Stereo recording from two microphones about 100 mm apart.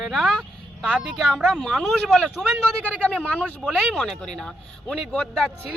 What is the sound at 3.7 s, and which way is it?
A man's voice, centre (ahead or behind).